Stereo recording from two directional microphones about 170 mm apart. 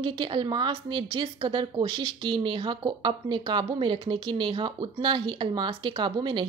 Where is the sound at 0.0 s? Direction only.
25° right (ahead or behind).